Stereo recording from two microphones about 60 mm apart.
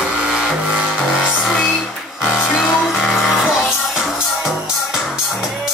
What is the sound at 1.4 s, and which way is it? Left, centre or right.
Music, centre.